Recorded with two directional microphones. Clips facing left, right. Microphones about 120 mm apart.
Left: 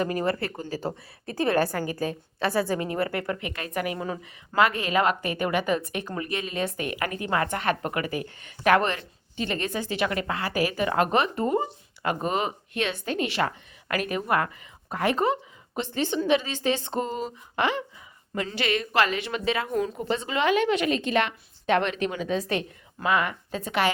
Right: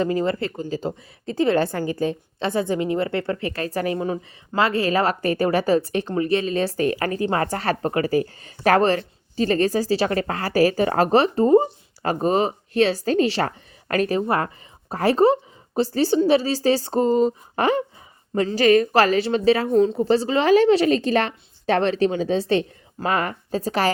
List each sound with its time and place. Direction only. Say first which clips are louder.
0.0 s a woman's voice: right 4 dB; 25° right (ahead or behind)